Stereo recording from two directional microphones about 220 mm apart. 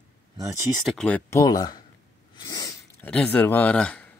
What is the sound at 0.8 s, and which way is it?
Speech, centre (ahead or behind).